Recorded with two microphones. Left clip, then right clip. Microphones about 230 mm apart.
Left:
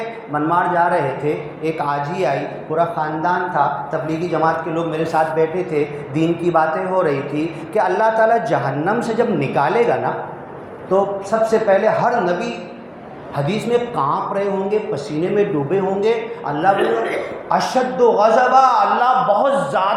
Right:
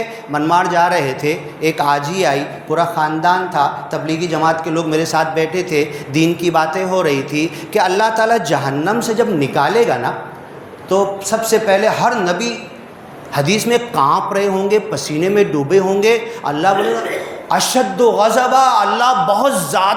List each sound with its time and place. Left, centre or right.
0.3 s a man's voice: right